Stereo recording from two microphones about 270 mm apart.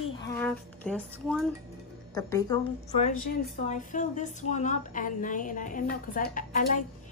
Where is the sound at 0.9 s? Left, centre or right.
Centre.